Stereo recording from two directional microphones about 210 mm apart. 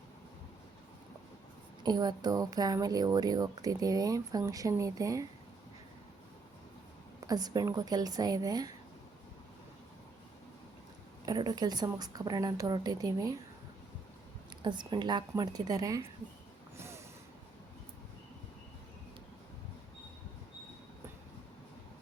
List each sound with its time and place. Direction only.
1.8 s speech: 20° right (ahead or behind)
7.3 s speech: 20° right (ahead or behind)
11.3 s a woman's voice: 20° right (ahead or behind)
14.6 s a woman's voice: 20° right (ahead or behind)
16.7 s a sound: 10° right (ahead or behind)